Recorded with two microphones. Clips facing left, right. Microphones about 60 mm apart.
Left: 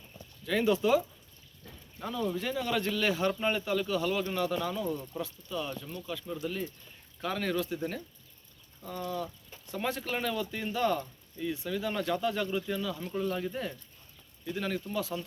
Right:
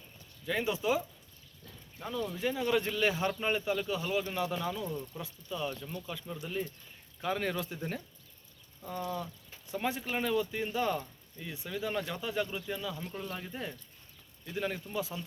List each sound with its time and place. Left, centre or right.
0.4 s speech: centre
1.6 s a sound: centre
2.3 s speech: centre
4.7 s speech: centre
5.2 s speech: centre
8.8 s speech: centre
13.0 s speech: centre
14.4 s speech: centre